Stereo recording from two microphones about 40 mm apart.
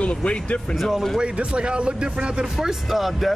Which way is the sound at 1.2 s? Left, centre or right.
Right.